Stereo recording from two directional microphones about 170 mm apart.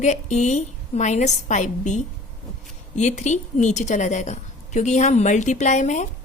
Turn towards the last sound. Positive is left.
turn(degrees=45)  # may be behind; listen again after turning